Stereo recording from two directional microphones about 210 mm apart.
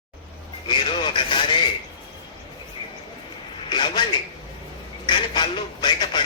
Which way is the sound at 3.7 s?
20° left (ahead or behind).